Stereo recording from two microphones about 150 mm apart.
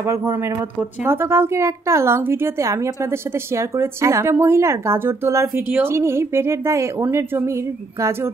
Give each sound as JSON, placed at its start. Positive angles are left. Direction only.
{"t": 0.0, "sound": "a woman's voice", "side_deg": -15}